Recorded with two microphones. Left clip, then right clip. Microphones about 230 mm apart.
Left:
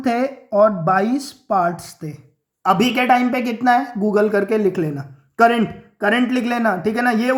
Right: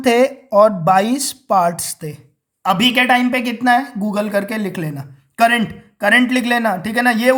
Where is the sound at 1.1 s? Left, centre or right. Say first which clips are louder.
Right 4 dB; right.